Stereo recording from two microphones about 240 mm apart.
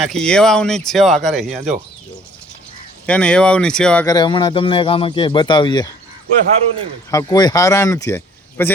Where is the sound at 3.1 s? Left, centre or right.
Centre.